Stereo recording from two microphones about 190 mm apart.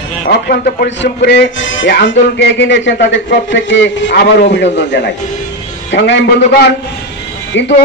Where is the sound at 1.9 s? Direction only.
60° left (ahead or behind).